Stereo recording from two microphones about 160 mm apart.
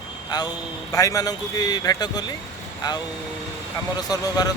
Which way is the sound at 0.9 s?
20° left (ahead or behind).